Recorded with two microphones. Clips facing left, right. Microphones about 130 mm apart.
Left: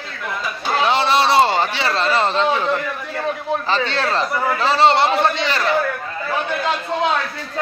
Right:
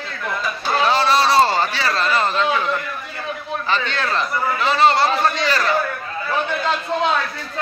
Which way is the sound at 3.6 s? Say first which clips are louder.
Even; 30° left (ahead or behind).